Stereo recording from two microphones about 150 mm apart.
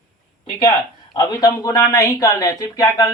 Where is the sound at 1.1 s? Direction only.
25° left (ahead or behind).